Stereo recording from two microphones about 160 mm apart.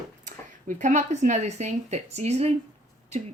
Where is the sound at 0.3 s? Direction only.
50° right (ahead or behind).